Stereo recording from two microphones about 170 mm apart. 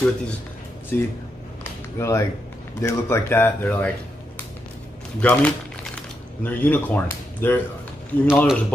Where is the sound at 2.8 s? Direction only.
15° left (ahead or behind).